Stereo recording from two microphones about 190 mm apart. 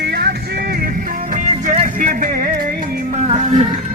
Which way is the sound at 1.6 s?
40° right (ahead or behind).